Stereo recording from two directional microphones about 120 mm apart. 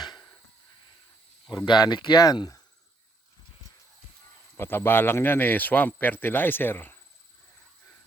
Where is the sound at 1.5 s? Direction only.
35° left (ahead or behind).